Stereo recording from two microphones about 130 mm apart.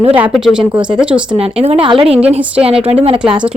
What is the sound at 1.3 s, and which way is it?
Speech, 50° right (ahead or behind).